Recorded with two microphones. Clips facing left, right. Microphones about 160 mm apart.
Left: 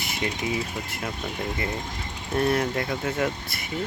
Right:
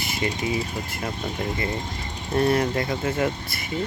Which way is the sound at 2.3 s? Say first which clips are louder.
Right 2 dB; centre (ahead or behind).